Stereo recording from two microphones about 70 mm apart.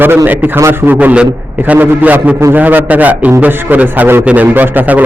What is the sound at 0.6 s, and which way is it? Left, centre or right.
A man's voice, right.